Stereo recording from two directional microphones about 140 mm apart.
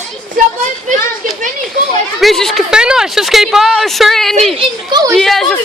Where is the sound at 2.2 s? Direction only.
Centre (ahead or behind).